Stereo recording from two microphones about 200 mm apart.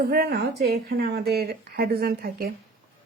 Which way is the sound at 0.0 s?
50° right (ahead or behind).